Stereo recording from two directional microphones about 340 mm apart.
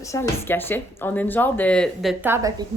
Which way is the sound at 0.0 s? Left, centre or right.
Centre.